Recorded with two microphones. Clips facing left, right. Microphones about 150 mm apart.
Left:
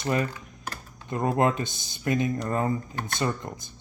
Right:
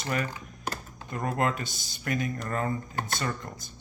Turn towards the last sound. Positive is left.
turn(degrees=20)  # may be behind; listen again after turning